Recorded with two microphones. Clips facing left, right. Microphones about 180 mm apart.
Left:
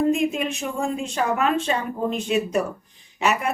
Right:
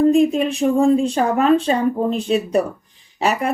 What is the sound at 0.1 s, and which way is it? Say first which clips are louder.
Speech: right 7 dB; 35° right (ahead or behind).